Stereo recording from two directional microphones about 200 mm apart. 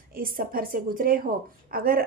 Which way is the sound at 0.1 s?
45° right (ahead or behind).